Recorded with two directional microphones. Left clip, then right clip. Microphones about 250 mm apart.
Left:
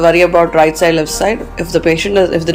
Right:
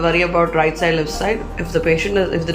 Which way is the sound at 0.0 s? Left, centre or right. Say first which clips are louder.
Left 7 dB; left.